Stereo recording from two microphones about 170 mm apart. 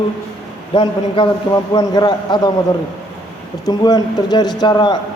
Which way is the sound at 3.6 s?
25° left (ahead or behind).